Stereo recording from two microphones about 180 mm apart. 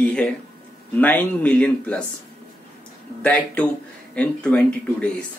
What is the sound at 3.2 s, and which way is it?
A man's voice, 10° left (ahead or behind).